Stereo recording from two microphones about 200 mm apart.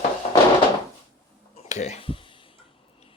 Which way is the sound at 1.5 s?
35° left (ahead or behind).